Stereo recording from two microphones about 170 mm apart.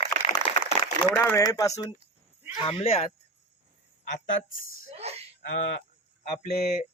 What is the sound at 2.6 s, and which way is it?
Speech, 35° left (ahead or behind).